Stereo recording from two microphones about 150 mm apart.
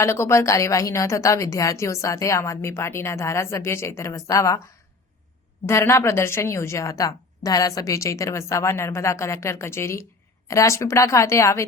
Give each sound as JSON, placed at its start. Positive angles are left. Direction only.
{"t": 0.0, "sound": "a woman's voice", "side_deg": 20}
{"t": 5.6, "sound": "a woman's voice", "side_deg": 15}